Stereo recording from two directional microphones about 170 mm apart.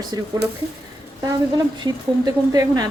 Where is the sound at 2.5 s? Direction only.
20° right (ahead or behind).